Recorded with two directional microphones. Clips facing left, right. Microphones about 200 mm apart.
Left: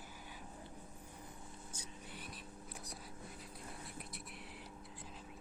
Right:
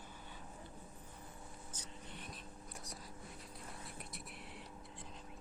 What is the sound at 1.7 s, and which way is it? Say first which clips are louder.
Whispering: even; 5° left (ahead or behind).